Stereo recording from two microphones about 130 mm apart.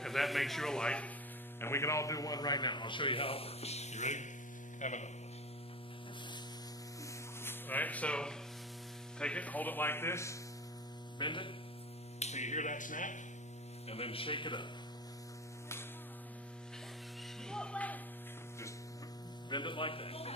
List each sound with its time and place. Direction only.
0.0 s speech: centre (ahead or behind)
1.6 s a man's voice: 20° left (ahead or behind); by 5.1 s 65° left (ahead or behind)
7.4 s a man's voice: 15° left (ahead or behind)
11.1 s a man's voice: 40° left (ahead or behind)
12.2 s speech: 60° left (ahead or behind); by 13.2 s 85° left
13.8 s speech: 50° left (ahead or behind)
17.5 s music: 5° left (ahead or behind)
19.5 s a man's voice: 40° left (ahead or behind)